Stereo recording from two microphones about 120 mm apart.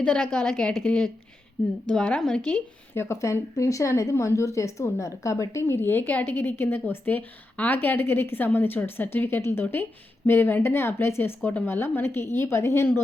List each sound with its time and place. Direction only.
0.0 s a woman's voice: 10° left (ahead or behind)
2.9 s a woman's voice: 20° left (ahead or behind)